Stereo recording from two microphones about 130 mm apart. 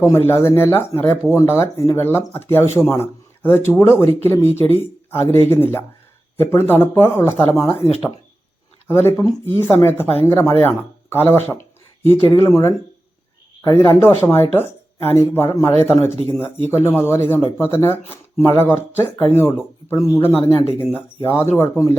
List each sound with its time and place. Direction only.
0.3 s speech: 20° left (ahead or behind)
8.9 s speech: 20° left (ahead or behind)